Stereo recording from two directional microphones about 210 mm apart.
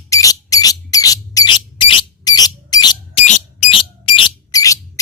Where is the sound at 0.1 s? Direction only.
15° left (ahead or behind).